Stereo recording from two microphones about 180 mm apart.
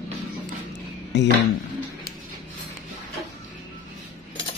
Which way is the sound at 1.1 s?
70° left (ahead or behind).